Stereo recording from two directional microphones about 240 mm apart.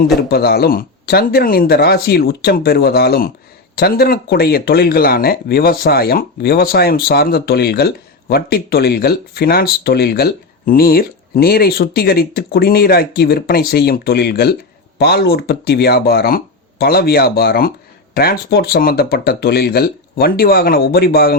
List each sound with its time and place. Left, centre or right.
0.2 s speech: left